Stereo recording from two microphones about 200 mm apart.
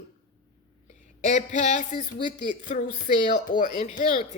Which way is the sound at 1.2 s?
35° left (ahead or behind).